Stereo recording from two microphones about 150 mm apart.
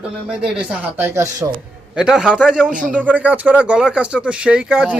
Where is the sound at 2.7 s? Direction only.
60° right (ahead or behind).